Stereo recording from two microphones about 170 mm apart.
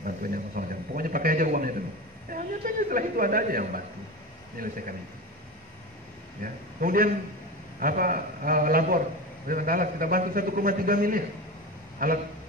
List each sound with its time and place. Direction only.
0.0 s a sound: 55° right (ahead or behind)
4.6 s a man's voice: 55° right (ahead or behind)
6.4 s a man's voice: 55° right (ahead or behind)